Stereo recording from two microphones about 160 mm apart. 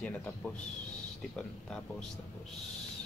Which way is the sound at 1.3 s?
5° left (ahead or behind).